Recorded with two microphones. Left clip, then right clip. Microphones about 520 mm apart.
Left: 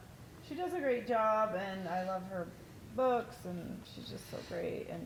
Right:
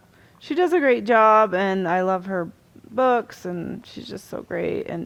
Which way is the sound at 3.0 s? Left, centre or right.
Right.